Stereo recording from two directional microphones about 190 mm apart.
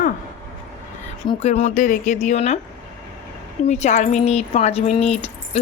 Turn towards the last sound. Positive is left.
turn(degrees=35)  # may be behind; listen again after turning